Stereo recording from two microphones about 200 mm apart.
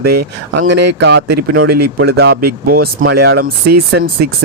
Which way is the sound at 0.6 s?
60° right (ahead or behind).